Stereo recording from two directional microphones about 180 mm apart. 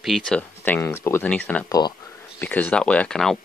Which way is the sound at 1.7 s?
25° left (ahead or behind).